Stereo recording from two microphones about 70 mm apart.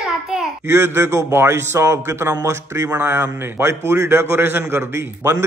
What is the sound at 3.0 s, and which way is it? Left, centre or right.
Speech, right.